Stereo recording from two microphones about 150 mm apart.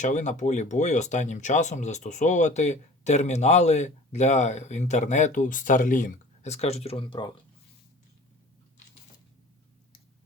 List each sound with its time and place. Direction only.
0.0 s speech: 55° left (ahead or behind); by 7.3 s 35° left (ahead or behind)